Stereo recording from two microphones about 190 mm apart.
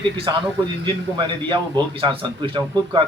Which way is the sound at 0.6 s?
20° right (ahead or behind).